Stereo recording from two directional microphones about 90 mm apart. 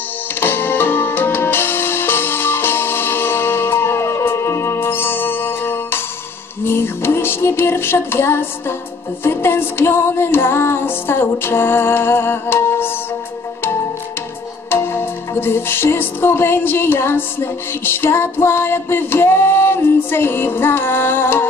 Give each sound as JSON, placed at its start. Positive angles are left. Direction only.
{"t": 0.4, "sound": "music", "side_deg": 25}
{"t": 14.7, "sound": "music", "side_deg": 25}